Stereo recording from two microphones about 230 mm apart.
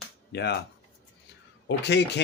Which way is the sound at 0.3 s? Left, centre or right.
Left.